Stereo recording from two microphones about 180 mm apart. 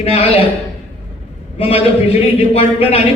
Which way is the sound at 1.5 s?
30° left (ahead or behind).